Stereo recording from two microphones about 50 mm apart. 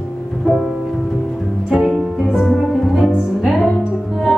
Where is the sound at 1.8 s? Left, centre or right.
Centre.